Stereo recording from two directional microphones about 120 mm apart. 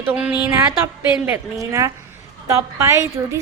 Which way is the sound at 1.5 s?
25° right (ahead or behind).